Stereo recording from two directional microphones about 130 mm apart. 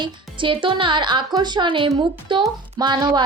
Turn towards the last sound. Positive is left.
turn(degrees=-35)  # may be behind; listen again after turning